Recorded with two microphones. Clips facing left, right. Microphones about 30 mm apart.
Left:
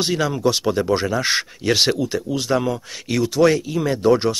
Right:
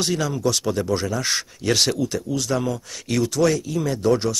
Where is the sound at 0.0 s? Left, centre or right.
Left.